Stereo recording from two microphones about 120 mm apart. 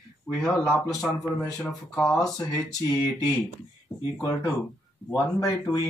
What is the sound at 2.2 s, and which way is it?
Speech, 25° left (ahead or behind).